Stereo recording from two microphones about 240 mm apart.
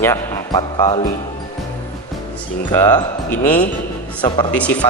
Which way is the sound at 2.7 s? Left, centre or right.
Centre.